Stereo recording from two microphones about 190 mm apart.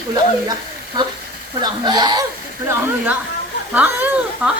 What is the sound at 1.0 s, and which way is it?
Speech, 20° right (ahead or behind).